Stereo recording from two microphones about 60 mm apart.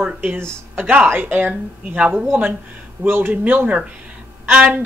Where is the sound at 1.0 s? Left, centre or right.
Right.